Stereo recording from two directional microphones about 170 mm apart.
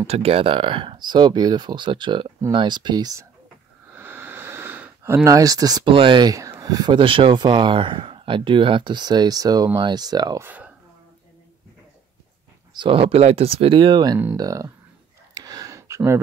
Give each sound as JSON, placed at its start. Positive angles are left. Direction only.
{"t": 0.0, "sound": "speech", "side_deg": -35}
{"t": 3.9, "sound": "speech", "side_deg": -10}
{"t": 12.7, "sound": "speech", "side_deg": -30}
{"t": 15.3, "sound": "a sound", "side_deg": -20}